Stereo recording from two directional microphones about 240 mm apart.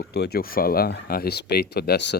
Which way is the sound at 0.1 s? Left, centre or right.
Left.